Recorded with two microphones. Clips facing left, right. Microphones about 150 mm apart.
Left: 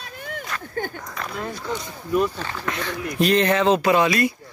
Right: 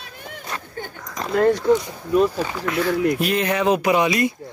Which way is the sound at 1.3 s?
80° right.